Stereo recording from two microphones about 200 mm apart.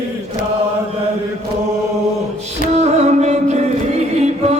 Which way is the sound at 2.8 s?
35° right (ahead or behind).